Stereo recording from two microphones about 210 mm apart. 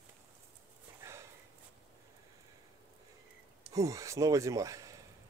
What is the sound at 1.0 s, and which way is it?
Sniff, 15° right (ahead or behind).